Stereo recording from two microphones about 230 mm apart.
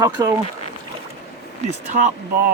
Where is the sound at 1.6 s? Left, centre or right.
Right.